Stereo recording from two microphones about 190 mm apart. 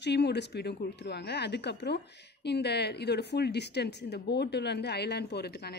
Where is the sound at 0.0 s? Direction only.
60° left (ahead or behind).